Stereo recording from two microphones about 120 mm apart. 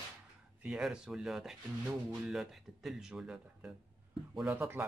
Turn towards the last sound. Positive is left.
turn(degrees=-15)  # may be behind; listen again after turning